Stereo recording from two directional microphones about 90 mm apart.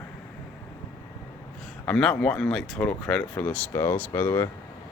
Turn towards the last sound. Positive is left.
turn(degrees=30)  # may be behind; listen again after turning